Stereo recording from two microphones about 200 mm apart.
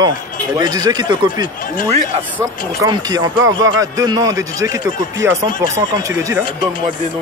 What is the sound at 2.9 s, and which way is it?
A man's voice, 20° right (ahead or behind).